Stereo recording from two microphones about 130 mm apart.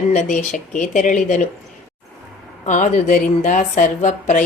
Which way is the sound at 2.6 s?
70° left (ahead or behind).